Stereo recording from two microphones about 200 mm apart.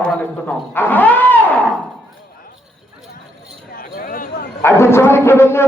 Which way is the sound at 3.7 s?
45° left (ahead or behind).